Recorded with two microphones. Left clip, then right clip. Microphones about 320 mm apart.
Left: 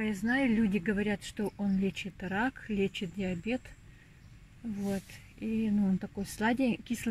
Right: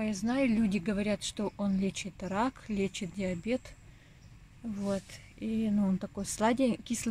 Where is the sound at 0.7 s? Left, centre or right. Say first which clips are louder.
Even; centre.